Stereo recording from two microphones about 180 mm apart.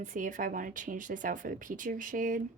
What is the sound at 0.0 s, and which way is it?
Speech, 45° right (ahead or behind).